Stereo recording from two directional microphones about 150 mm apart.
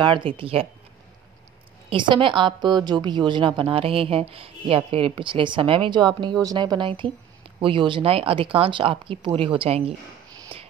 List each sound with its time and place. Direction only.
0.0 s a woman's voice: 35° right (ahead or behind)
1.9 s a woman's voice: 35° right (ahead or behind)
10.5 s a sound: 35° right (ahead or behind)